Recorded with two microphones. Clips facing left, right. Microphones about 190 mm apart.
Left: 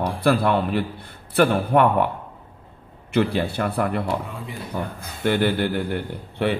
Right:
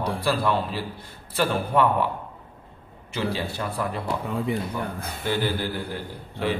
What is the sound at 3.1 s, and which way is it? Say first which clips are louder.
Speech: left 7 dB; 60° left (ahead or behind).